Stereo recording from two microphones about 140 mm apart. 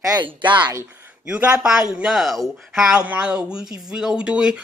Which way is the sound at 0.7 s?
20° right (ahead or behind).